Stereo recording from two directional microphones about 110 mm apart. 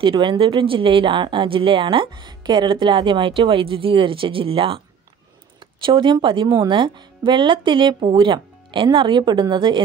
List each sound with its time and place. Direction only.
0.0 s speech: 45° right (ahead or behind)